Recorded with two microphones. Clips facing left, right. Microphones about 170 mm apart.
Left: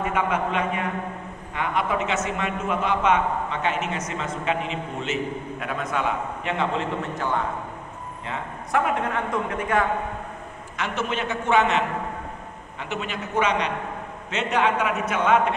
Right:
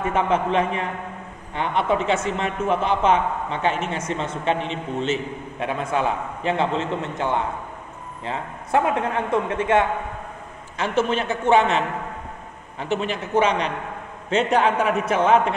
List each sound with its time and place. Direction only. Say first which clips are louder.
0.0 s a man's voice: right 3 dB; 30° right (ahead or behind)